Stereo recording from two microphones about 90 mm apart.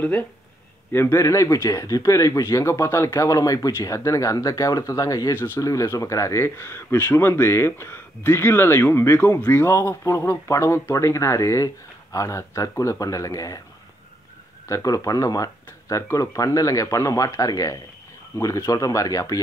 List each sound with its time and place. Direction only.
0.9 s speech: 30° left (ahead or behind)
5.3 s speech: 25° left (ahead or behind)
14.7 s speech: 35° left (ahead or behind)